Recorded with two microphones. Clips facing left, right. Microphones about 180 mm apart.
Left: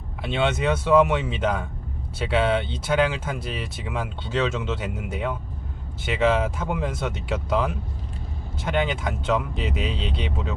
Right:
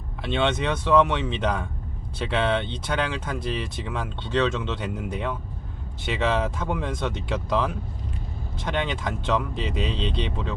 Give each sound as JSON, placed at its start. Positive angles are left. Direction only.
{"t": 0.2, "sound": "speech", "side_deg": 5}